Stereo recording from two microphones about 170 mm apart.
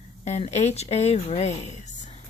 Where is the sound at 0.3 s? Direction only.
40° left (ahead or behind).